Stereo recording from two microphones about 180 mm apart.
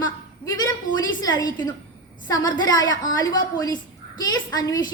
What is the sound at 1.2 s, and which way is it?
A woman's voice, 20° left (ahead or behind).